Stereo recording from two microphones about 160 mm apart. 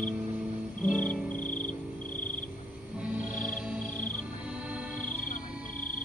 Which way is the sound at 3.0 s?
10° right (ahead or behind).